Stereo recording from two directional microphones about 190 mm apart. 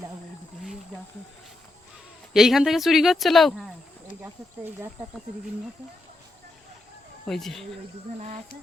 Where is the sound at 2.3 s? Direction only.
Centre (ahead or behind).